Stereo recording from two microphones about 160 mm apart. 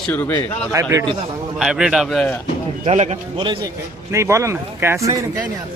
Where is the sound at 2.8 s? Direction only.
45° right (ahead or behind).